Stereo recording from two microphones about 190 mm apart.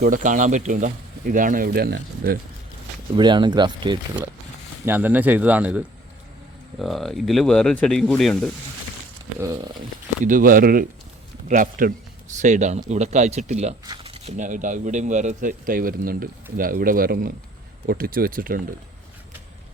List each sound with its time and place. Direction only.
0.0 s speech: 45° right (ahead or behind)
3.2 s speech: 25° right (ahead or behind)
4.9 s speech: 10° right (ahead or behind)
10.2 s speech: 45° right (ahead or behind)